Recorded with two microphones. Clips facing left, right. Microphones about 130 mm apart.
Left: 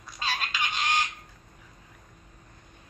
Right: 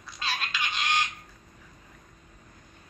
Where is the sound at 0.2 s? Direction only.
45° left (ahead or behind).